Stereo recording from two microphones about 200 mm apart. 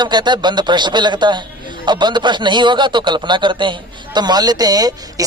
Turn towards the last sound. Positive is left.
turn(degrees=-20)  # may be behind; listen again after turning